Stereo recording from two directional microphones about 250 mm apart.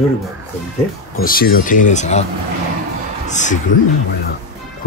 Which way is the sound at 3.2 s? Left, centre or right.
Left.